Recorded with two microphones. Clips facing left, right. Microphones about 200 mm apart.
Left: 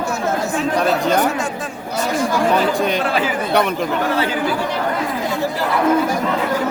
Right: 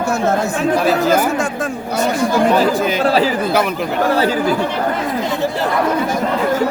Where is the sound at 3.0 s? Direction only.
35° right (ahead or behind).